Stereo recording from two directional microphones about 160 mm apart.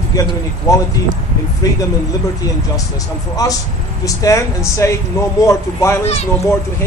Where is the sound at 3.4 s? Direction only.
20° left (ahead or behind).